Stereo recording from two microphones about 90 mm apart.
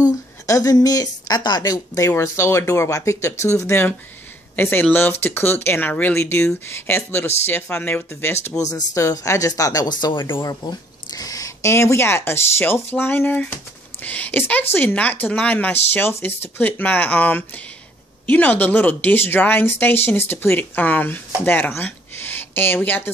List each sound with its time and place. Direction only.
0.5 s speech: 40° left (ahead or behind); by 8.5 s 25° left (ahead or behind)
8.5 s speech: 40° left (ahead or behind); by 10.4 s 65° left (ahead or behind)
10.4 s speech: 50° left (ahead or behind); by 23.1 s 20° left (ahead or behind)